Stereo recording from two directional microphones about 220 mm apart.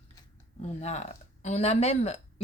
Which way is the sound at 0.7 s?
30° left (ahead or behind).